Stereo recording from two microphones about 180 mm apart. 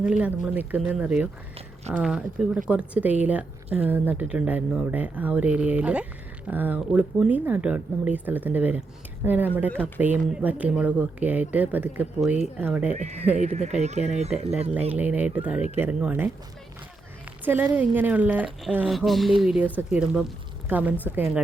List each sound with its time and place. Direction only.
0.1 s speech: 10° right (ahead or behind)
12.9 s speech: 40° right (ahead or behind)
14.9 s speech: 10° right (ahead or behind)
17.4 s speech: 10° right (ahead or behind)